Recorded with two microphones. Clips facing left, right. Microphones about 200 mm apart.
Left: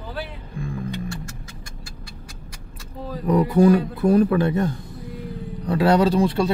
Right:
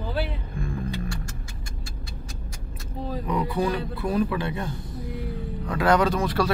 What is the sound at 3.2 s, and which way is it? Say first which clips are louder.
Speech: left 10 dB; 45° left (ahead or behind).